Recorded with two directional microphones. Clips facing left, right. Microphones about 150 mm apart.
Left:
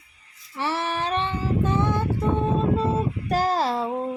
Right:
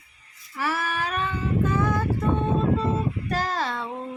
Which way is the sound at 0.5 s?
25° left (ahead or behind).